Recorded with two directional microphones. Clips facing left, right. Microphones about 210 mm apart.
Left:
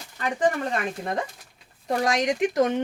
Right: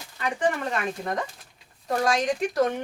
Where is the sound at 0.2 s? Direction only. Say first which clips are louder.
Left 2 dB; 35° left (ahead or behind).